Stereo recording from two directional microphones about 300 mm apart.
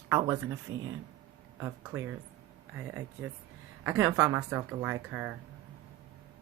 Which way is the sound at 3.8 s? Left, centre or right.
Centre.